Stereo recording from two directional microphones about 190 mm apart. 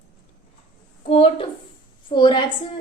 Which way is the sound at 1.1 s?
30° left (ahead or behind).